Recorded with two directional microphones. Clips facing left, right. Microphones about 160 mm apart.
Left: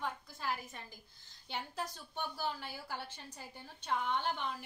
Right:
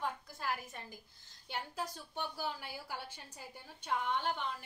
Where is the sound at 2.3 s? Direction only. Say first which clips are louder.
Left 1 dB; 10° right (ahead or behind).